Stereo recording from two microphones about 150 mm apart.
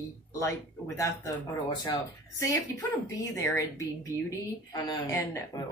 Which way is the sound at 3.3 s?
20° left (ahead or behind).